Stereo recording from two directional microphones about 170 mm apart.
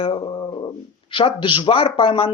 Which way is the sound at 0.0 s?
30° left (ahead or behind).